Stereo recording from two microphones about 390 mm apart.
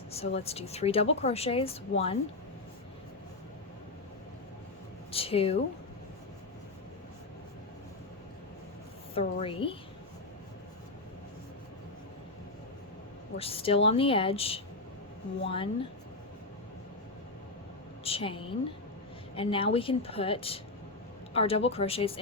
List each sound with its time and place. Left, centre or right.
0.1 s a woman's voice: centre
5.1 s a sound: centre
9.1 s a woman's voice: centre
13.3 s a woman's voice: centre
18.0 s a woman's voice: centre